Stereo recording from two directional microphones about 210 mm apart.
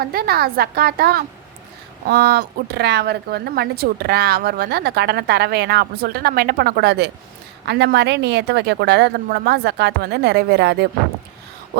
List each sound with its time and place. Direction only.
0.0 s speech: 45° right (ahead or behind)